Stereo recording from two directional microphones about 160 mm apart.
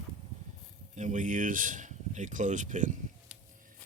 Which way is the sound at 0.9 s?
50° right (ahead or behind).